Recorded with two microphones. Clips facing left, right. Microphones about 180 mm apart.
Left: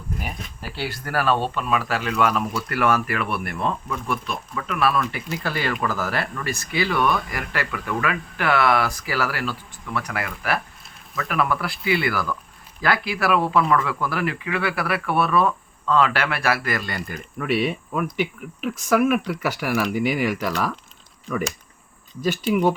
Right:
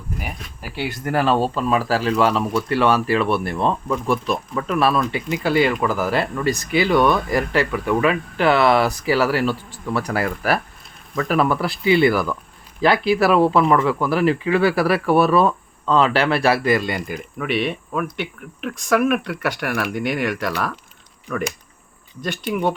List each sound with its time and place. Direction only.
0.8 s speech: 20° right (ahead or behind)
1.4 s speech: 35° right (ahead or behind)
4.9 s speech: 15° right (ahead or behind)
17.3 s speech: centre (ahead or behind)